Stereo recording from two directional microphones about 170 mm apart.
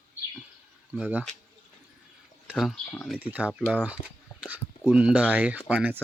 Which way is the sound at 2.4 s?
Centre (ahead or behind).